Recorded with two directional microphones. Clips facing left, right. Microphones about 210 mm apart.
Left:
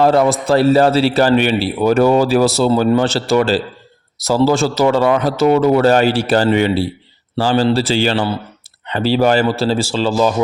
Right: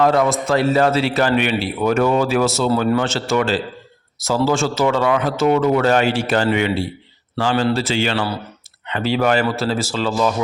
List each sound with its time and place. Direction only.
0.0 s a man's voice: 35° left (ahead or behind)